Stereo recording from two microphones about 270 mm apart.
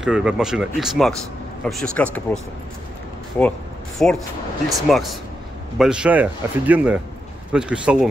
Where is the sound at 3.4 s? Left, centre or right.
Centre.